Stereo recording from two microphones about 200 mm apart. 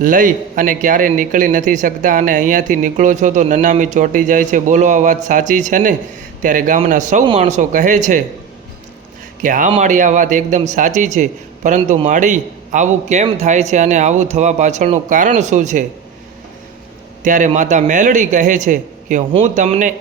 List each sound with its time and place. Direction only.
0.0 s a man's voice: 40° right (ahead or behind)
9.4 s a man's voice: 40° right (ahead or behind)
17.2 s a man's voice: 40° right (ahead or behind)